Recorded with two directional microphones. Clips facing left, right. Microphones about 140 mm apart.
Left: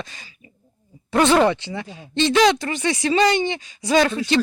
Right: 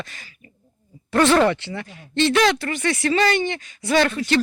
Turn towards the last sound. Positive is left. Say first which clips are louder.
# left 1 dB
turn(degrees=15)  # may be behind; listen again after turning